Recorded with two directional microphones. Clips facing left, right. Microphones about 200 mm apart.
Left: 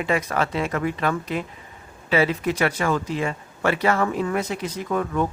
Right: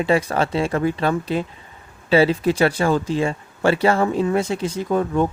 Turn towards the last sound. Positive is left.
turn(degrees=-30)  # may be behind; listen again after turning